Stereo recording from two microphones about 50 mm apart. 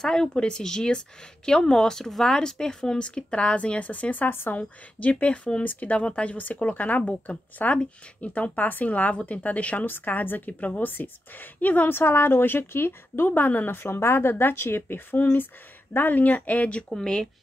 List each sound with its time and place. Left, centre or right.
0.0 s speech: centre; by 4.6 s left
4.6 s speech: left
11.9 s a woman's voice: left
13.8 s a woman's voice: left
16.9 s speech: centre